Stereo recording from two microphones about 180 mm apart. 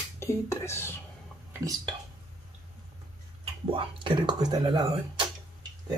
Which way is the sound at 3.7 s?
25° right (ahead or behind).